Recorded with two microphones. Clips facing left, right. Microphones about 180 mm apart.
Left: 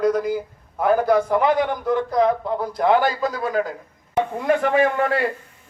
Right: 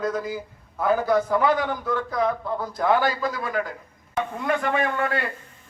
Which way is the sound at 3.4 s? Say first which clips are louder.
Left 5 dB; 35° left (ahead or behind).